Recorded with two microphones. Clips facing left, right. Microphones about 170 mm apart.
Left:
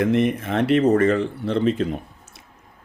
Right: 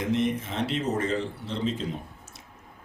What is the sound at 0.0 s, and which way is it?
Speech, 60° left (ahead or behind).